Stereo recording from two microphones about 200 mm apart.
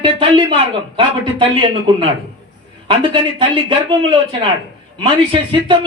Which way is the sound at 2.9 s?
25° right (ahead or behind).